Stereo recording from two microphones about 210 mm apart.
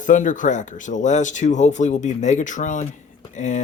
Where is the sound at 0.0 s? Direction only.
35° left (ahead or behind).